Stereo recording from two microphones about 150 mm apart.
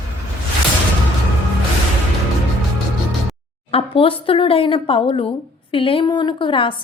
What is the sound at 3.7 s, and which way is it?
A woman's voice, 40° left (ahead or behind).